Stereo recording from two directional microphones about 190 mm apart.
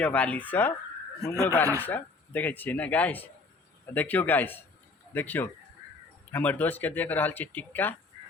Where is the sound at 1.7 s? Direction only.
10° left (ahead or behind).